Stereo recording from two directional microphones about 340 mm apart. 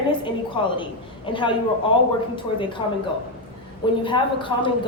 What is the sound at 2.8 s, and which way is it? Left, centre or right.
Speech, centre.